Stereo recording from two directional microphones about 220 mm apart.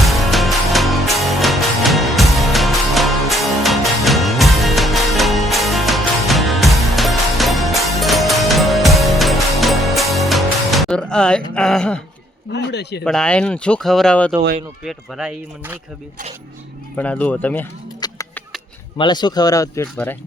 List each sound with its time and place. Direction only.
0.0 s music: centre (ahead or behind)
11.5 s speech: 5° left (ahead or behind)
12.5 s speech: 50° left (ahead or behind)
13.1 s speech: 5° left (ahead or behind)
17.0 s speech: 5° left (ahead or behind)
18.0 s music: 15° left (ahead or behind)
18.9 s speech: 20° left (ahead or behind)